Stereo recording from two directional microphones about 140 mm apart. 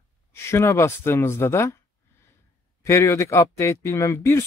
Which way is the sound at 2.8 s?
20° left (ahead or behind).